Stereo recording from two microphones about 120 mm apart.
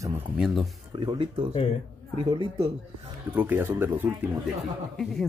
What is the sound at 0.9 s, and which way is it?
Speech, 40° right (ahead or behind).